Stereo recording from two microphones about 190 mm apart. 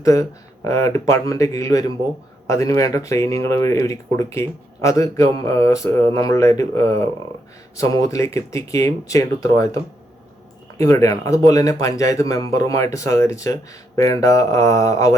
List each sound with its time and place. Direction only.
0.0 s speech: 15° left (ahead or behind)